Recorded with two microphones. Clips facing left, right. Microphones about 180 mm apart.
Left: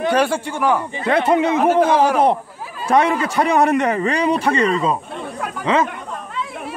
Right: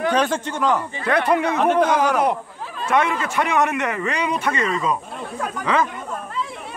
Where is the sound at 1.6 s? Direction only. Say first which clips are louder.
Left 2 dB; 5° left (ahead or behind).